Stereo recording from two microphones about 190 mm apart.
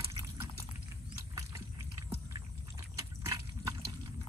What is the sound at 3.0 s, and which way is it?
Liquid, 15° right (ahead or behind).